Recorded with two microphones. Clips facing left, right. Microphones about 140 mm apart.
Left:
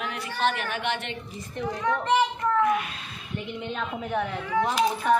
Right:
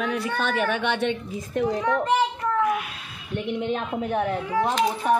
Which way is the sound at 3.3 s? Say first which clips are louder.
Right 5 dB; 75° right (ahead or behind).